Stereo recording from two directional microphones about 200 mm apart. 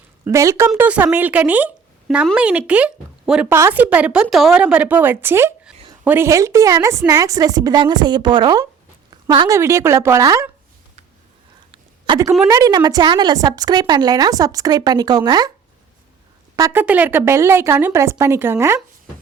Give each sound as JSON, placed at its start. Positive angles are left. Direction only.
{"t": 0.3, "sound": "a woman's voice", "side_deg": -15}
{"t": 9.0, "sound": "a sound", "side_deg": -25}
{"t": 9.6, "sound": "a woman's voice", "side_deg": -15}
{"t": 11.7, "sound": "a sound", "side_deg": -25}
{"t": 12.5, "sound": "a woman's voice", "side_deg": -20}
{"t": 16.6, "sound": "a woman's voice", "side_deg": -15}